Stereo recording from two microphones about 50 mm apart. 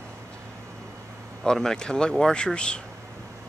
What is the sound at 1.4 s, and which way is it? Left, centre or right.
Speech, centre.